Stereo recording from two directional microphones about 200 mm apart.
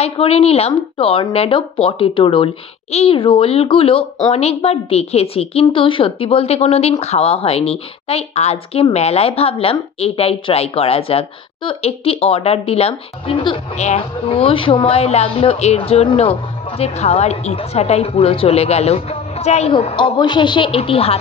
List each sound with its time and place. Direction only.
0.0 s a woman's voice: 30° left (ahead or behind)